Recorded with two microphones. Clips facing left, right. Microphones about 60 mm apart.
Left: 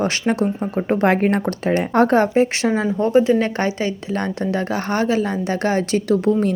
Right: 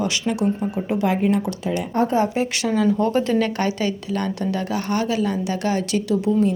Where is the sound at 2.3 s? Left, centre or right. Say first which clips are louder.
Left 5 dB; left.